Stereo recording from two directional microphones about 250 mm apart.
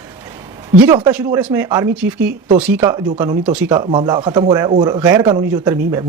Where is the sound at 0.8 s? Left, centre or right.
Centre.